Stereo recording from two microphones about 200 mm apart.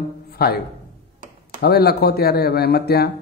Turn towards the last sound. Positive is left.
turn(degrees=50)  # may be behind; listen again after turning